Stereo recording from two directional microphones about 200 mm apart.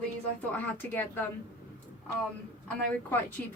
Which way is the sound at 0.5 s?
10° left (ahead or behind).